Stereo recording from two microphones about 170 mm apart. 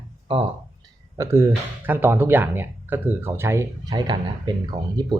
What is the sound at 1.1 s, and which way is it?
Speech, 15° right (ahead or behind).